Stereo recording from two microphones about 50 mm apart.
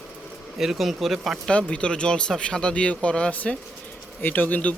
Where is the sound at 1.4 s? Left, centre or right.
Centre.